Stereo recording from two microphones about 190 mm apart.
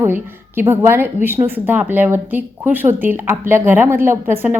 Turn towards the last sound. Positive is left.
turn(degrees=-10)  # may be behind; listen again after turning